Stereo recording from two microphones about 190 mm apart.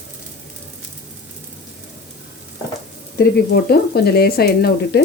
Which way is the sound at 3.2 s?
55° left (ahead or behind).